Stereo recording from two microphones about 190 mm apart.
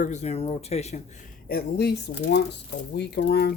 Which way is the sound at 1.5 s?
55° left (ahead or behind).